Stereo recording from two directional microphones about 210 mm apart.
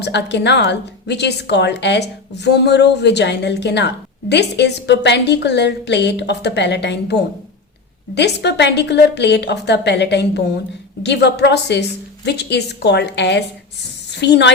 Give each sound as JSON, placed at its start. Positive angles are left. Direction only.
{"t": 0.0, "sound": "a woman's voice", "side_deg": 55}